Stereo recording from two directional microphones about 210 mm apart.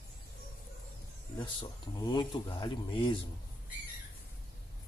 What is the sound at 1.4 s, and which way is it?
Speech, 20° left (ahead or behind).